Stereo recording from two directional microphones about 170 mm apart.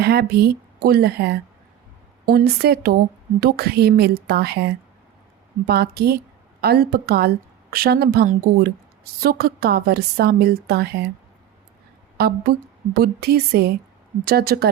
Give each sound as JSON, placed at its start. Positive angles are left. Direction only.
{"t": 0.0, "sound": "a woman's voice", "side_deg": -70}
{"t": 12.1, "sound": "a woman's voice", "side_deg": -65}